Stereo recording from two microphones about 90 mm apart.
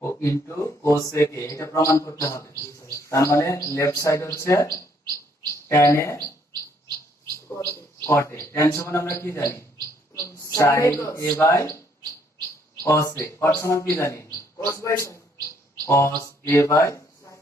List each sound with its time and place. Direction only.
0.0 s speech: 30° left (ahead or behind)
7.6 s a man's voice: 30° left (ahead or behind)
12.8 s speech: 35° left (ahead or behind)